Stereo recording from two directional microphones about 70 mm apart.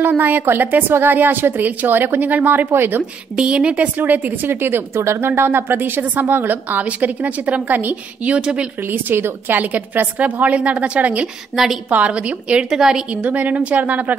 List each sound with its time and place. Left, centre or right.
0.0 s speech: right
3.0 s speech: centre
8.8 s speech: right
11.5 s a woman's voice: centre
11.9 s a woman's voice: centre
13.1 s speech: right